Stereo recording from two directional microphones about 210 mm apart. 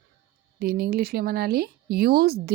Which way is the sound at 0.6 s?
45° right (ahead or behind).